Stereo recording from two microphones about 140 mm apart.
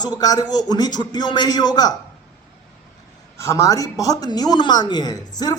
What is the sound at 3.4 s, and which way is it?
A man's voice, 20° left (ahead or behind).